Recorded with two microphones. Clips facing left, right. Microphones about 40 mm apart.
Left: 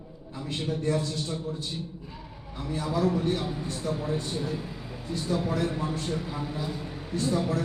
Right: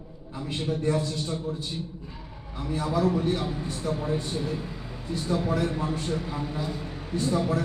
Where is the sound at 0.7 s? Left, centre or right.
Centre.